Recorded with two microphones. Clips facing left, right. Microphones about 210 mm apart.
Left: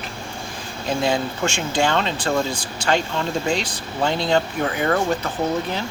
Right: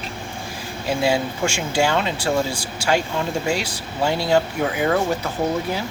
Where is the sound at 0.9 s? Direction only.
10° right (ahead or behind).